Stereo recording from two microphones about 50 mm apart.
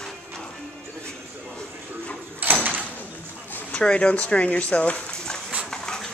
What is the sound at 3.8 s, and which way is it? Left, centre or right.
Speech, left.